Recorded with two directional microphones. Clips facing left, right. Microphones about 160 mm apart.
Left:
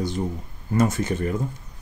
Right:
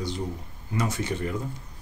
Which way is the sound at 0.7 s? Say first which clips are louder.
Left 7 dB; 45° left (ahead or behind).